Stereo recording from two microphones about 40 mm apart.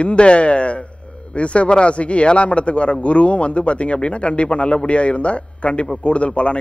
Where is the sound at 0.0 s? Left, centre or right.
Left.